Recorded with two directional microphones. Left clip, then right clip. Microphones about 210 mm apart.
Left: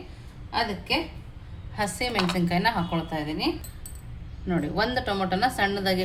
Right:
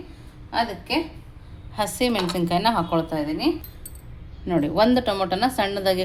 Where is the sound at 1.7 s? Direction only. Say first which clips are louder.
Right 4 dB; 35° right (ahead or behind).